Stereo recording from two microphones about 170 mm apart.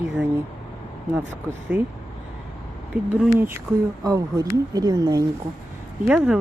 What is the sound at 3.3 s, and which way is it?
Speech, 15° right (ahead or behind).